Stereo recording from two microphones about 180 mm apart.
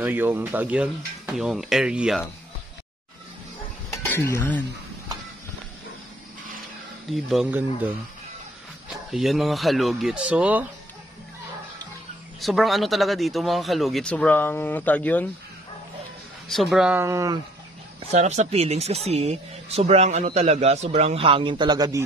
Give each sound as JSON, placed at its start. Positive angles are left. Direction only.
{"t": 0.0, "sound": "speech", "side_deg": -10}
{"t": 4.1, "sound": "speech", "side_deg": 15}
{"t": 7.1, "sound": "speech", "side_deg": 0}
{"t": 9.1, "sound": "speech", "side_deg": 0}
{"t": 12.4, "sound": "speech", "side_deg": 0}
{"t": 16.4, "sound": "speech", "side_deg": 0}
{"t": 18.1, "sound": "speech", "side_deg": -40}